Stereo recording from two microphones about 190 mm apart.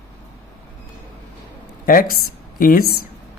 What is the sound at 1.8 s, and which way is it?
Speech, 50° left (ahead or behind).